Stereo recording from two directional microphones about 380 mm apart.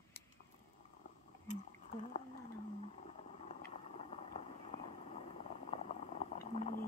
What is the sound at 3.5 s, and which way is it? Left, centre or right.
Vehicle, centre.